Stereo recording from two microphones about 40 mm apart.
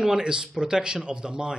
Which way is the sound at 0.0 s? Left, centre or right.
Centre.